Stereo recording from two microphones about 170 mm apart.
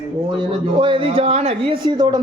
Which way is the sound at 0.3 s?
30° right (ahead or behind).